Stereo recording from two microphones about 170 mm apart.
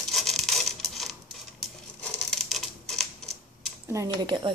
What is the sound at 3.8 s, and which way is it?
Speech, 20° right (ahead or behind).